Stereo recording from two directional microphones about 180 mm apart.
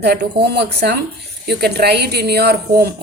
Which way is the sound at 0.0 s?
65° right (ahead or behind).